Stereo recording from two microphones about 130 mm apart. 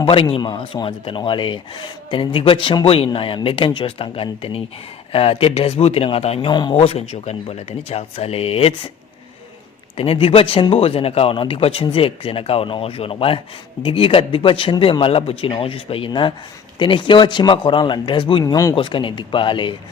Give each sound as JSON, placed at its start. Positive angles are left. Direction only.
{"t": 0.0, "sound": "speech", "side_deg": 45}
{"t": 6.5, "sound": "speech", "side_deg": 35}
{"t": 6.7, "sound": "speech", "side_deg": 50}
{"t": 10.0, "sound": "speech", "side_deg": 45}
{"t": 18.7, "sound": "speech", "side_deg": 40}